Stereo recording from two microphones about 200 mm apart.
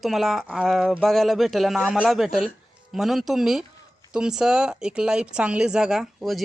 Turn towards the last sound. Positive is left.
turn(degrees=0)  # may be behind; listen again after turning